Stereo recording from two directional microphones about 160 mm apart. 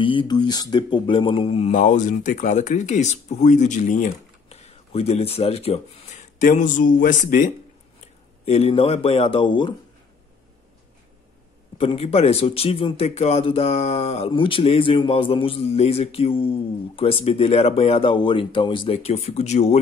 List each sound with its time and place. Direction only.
0.0 s speech: 30° left (ahead or behind); by 7.5 s 55° left (ahead or behind)
8.0 s speech: 40° left (ahead or behind)
11.8 s speech: 35° left (ahead or behind)